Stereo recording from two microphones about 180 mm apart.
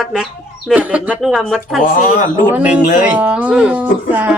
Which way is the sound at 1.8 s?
50° left (ahead or behind).